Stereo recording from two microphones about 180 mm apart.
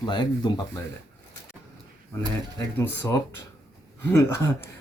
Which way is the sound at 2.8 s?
20° left (ahead or behind).